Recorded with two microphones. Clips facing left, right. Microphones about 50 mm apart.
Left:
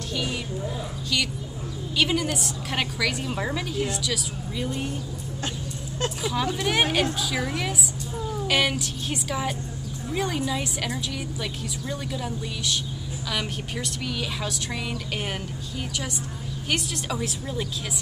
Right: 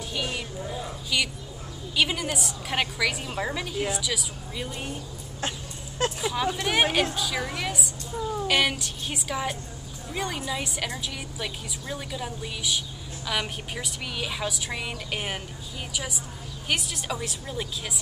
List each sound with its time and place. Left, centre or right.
0.1 s a sound: centre
1.1 s a woman's voice: centre
5.9 s a woman's voice: centre